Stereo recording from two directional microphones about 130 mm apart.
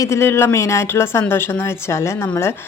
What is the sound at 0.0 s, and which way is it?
A woman's voice, 20° left (ahead or behind).